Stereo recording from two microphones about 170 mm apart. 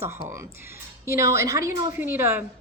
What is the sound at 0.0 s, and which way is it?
A woman's voice, 15° right (ahead or behind).